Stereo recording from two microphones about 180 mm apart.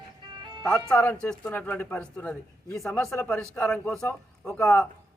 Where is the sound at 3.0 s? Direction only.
15° left (ahead or behind).